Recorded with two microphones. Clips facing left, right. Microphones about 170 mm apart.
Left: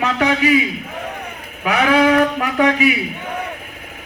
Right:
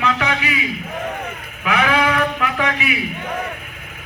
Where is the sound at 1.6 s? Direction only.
40° left (ahead or behind).